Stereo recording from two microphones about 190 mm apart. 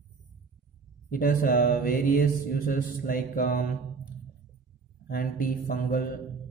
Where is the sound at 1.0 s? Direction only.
50° left (ahead or behind).